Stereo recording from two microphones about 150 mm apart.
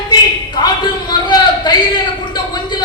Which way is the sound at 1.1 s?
30° left (ahead or behind).